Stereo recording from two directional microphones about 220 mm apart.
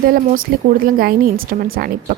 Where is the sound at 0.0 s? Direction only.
40° right (ahead or behind).